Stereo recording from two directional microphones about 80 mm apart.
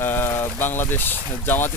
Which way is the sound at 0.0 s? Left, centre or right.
Left.